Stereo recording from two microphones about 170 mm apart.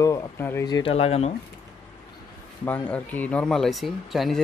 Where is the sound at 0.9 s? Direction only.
35° left (ahead or behind).